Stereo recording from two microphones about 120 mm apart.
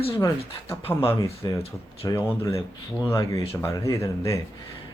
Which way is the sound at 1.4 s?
35° left (ahead or behind).